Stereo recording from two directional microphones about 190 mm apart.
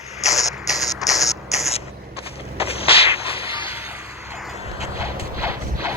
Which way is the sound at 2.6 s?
30° left (ahead or behind).